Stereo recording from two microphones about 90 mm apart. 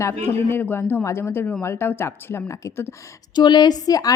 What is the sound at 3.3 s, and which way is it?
Speech, 55° left (ahead or behind).